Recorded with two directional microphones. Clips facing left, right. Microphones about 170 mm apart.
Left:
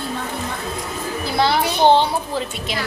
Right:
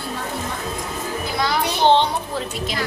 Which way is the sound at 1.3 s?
30° left (ahead or behind).